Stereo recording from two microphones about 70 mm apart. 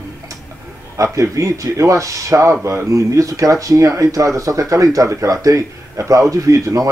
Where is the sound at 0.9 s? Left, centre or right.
Right.